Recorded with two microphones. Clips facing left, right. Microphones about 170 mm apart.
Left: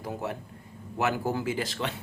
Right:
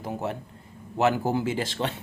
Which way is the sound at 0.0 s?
25° right (ahead or behind).